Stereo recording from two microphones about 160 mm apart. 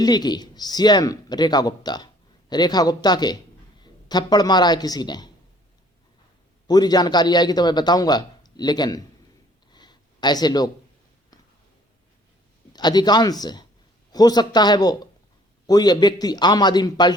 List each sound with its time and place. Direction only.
0.0 s a man's voice: 25° left (ahead or behind)
6.7 s a man's voice: 25° left (ahead or behind)
9.7 s a sound: 25° left (ahead or behind)
12.7 s a man's voice: 25° left (ahead or behind)